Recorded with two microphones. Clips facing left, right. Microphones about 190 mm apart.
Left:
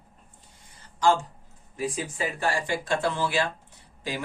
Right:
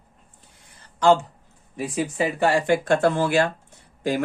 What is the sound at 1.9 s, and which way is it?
Speech, 65° right (ahead or behind).